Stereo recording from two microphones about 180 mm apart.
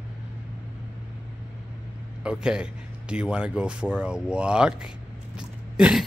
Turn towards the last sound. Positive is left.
turn(degrees=-5)  # may be behind; listen again after turning